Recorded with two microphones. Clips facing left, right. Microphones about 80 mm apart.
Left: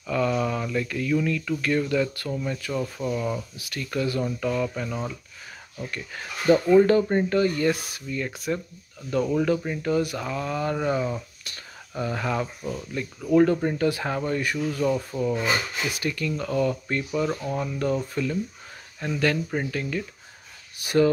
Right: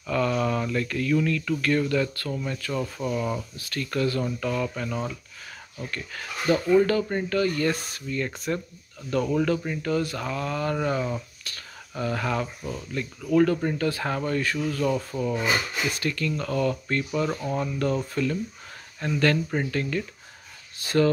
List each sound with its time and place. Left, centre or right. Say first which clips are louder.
0.0 s speech: even; centre
3.5 s speech: right 1 dB; centre
5.9 s speech: right 1 dB; centre
16.0 s speech: even; centre
17.6 s speech: even; centre
20.7 s a sound: left 2 dB; centre